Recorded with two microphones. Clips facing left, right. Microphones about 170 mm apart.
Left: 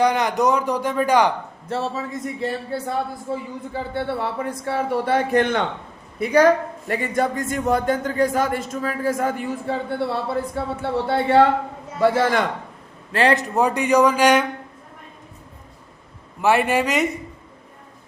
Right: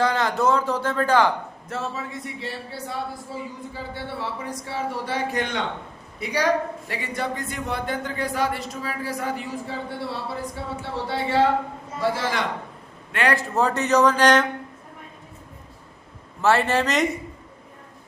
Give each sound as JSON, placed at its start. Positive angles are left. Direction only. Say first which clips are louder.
{"t": 0.0, "sound": "speech", "louder": "left 3 dB", "side_deg": 15}
{"t": 1.6, "sound": "a man's voice", "louder": "left 6 dB", "side_deg": 30}
{"t": 13.1, "sound": "a man's voice", "louder": "left 4 dB", "side_deg": 30}
{"t": 13.6, "sound": "speech", "louder": "left 2 dB", "side_deg": 15}
{"t": 16.4, "sound": "speech", "louder": "left 2 dB", "side_deg": 15}